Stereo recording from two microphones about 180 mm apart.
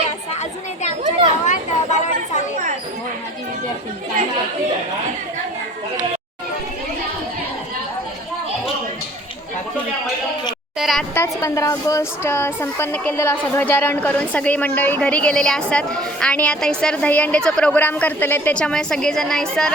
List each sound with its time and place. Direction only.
1.5 s chatter: 40° left (ahead or behind)
10.8 s a sound: centre (ahead or behind)
11.1 s a woman's voice: 15° left (ahead or behind)